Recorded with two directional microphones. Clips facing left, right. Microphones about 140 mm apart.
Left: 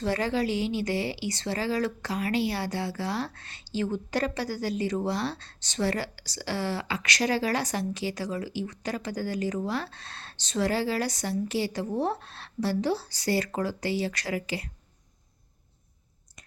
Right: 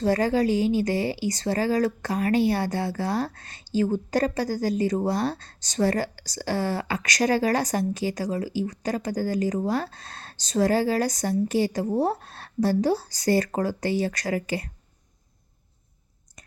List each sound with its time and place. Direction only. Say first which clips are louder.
0.0 s speech: right 5 dB; 40° right (ahead or behind)